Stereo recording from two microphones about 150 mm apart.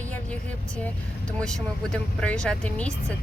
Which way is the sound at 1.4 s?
5° left (ahead or behind).